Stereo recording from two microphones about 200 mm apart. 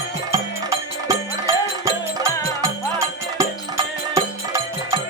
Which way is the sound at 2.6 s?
15° right (ahead or behind).